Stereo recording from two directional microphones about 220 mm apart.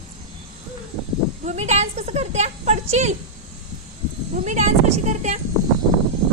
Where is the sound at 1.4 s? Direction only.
30° right (ahead or behind).